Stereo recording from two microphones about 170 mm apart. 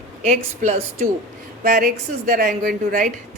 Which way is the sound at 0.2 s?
45° right (ahead or behind).